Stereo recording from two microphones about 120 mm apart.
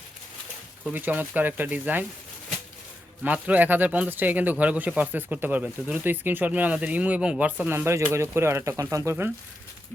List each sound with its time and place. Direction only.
0.9 s speech: 15° right (ahead or behind)
3.2 s speech: 10° right (ahead or behind)